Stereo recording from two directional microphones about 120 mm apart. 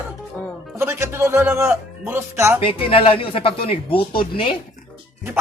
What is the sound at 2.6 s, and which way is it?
Speech, 50° left (ahead or behind).